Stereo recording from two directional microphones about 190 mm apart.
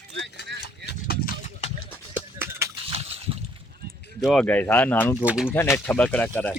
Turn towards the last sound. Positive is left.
turn(degrees=10)  # may be behind; listen again after turning